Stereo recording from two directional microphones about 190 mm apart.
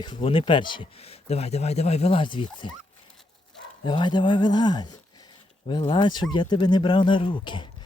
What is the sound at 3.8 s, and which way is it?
Speech, 25° left (ahead or behind).